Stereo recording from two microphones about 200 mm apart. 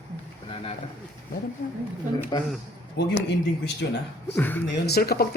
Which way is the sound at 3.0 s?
55° left (ahead or behind).